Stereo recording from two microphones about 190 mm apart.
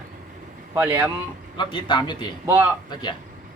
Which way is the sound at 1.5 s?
25° left (ahead or behind).